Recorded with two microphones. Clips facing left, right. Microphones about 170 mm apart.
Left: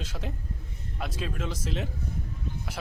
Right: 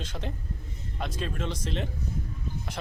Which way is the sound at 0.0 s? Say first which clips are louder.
Right 1 dB; 5° left (ahead or behind).